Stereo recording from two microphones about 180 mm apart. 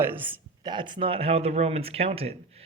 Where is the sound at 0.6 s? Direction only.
25° right (ahead or behind).